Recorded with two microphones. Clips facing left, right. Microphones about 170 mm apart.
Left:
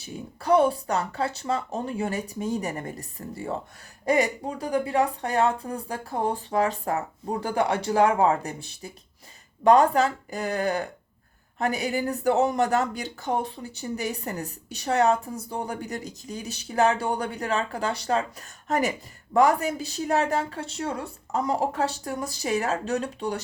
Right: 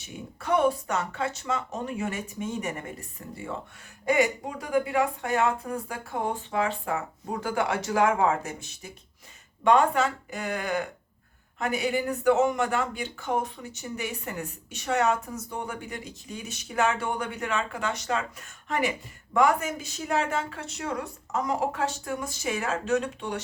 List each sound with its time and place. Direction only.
0.0 s speech: 35° left (ahead or behind)